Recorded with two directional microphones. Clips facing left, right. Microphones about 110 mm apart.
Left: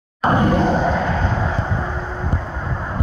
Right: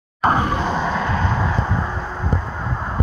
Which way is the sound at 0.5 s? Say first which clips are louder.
Left 5 dB; 55° left (ahead or behind).